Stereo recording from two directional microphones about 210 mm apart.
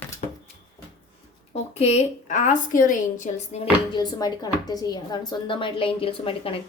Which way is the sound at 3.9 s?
20° left (ahead or behind).